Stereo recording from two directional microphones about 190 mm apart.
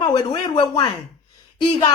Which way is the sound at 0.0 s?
25° left (ahead or behind).